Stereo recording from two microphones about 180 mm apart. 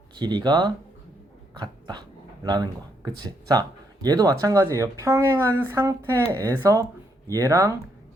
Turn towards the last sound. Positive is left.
turn(degrees=-20)  # may be behind; listen again after turning